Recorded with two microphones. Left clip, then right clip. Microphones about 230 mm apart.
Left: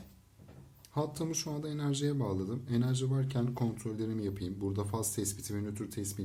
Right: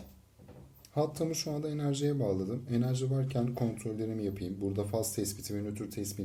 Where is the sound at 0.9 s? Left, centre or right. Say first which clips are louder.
Right 3 dB; left.